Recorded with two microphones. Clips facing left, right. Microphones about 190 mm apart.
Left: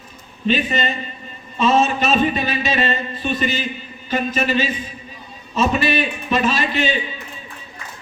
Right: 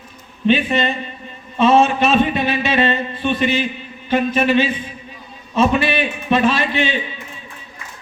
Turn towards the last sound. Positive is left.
turn(degrees=-60)  # may be behind; listen again after turning